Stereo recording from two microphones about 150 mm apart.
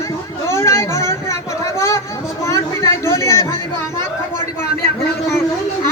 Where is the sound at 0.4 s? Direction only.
20° left (ahead or behind).